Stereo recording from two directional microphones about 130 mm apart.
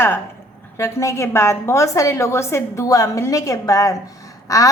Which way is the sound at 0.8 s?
20° left (ahead or behind).